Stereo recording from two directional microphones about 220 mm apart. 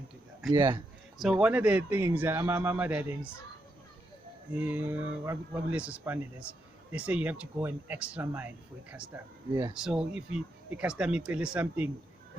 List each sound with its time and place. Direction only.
0.4 s a man's voice: 10° right (ahead or behind)
4.5 s a man's voice: 5° right (ahead or behind)